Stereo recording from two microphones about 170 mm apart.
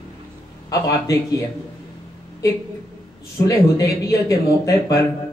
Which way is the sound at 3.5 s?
20° left (ahead or behind).